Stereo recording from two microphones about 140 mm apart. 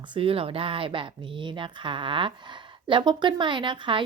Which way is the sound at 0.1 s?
40° right (ahead or behind).